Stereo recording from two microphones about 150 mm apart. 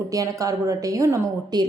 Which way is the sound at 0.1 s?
20° right (ahead or behind).